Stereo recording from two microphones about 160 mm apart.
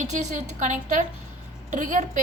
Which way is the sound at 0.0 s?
45° right (ahead or behind).